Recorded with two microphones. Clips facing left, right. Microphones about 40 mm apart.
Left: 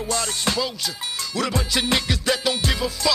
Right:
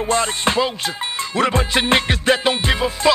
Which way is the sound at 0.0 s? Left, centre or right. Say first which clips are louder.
Right 6 dB; right.